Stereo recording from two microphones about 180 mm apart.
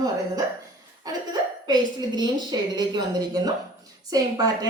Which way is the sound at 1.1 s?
20° right (ahead or behind).